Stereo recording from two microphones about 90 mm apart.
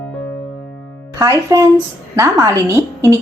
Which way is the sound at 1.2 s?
40° right (ahead or behind).